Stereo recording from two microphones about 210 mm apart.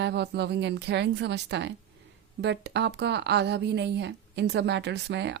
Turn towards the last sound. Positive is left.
turn(degrees=-55)  # may be behind; listen again after turning